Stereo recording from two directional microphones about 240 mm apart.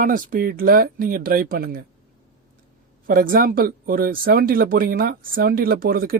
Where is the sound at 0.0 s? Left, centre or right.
Right.